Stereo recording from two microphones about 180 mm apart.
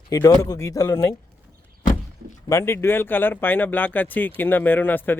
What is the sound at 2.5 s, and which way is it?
Speech, 15° left (ahead or behind).